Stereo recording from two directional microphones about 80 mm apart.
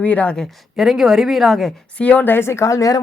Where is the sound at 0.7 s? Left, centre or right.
Centre.